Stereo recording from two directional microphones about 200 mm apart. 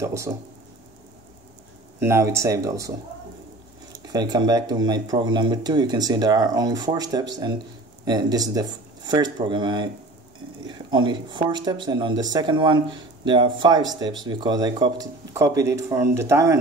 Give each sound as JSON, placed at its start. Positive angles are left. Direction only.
{"t": 0.0, "sound": "speech", "side_deg": -15}
{"t": 2.0, "sound": "speech", "side_deg": -10}
{"t": 3.9, "sound": "speech", "side_deg": -20}